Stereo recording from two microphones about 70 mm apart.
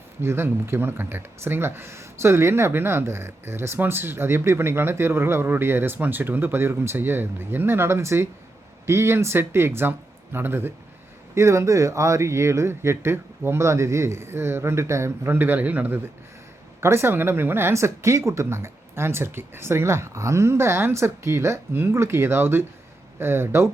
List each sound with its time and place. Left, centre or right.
0.2 s speech: right
11.3 s speech: right
16.8 s speech: right